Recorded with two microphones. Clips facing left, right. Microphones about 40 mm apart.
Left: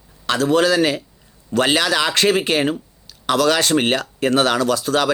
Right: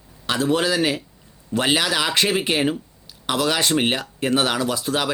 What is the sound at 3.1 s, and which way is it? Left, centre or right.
Speech, left.